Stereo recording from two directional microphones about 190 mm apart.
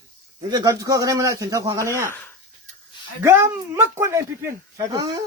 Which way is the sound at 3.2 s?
15° right (ahead or behind).